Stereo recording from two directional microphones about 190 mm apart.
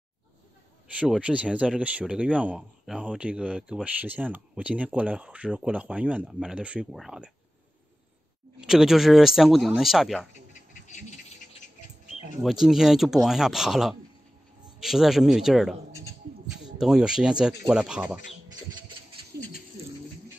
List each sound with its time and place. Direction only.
0.9 s speech: 5° right (ahead or behind)
8.5 s speech: centre (ahead or behind)
10.9 s insect: 35° left (ahead or behind)
12.4 s speech: centre (ahead or behind)
16.8 s speech: 5° right (ahead or behind)